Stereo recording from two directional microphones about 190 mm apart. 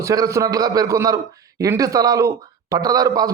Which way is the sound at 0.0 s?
15° right (ahead or behind).